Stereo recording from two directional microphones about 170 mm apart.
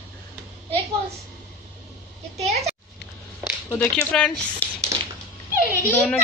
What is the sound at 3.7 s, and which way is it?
Speech, 15° left (ahead or behind).